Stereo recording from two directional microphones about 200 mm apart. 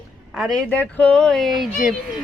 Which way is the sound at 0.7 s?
10° left (ahead or behind).